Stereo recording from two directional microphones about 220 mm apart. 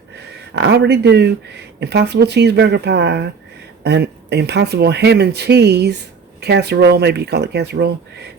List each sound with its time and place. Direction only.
0.5 s speech: 50° right (ahead or behind)